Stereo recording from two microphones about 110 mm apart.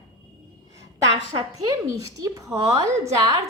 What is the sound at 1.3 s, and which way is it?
A woman's voice, 35° right (ahead or behind).